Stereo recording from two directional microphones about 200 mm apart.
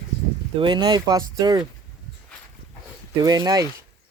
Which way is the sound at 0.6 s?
25° right (ahead or behind).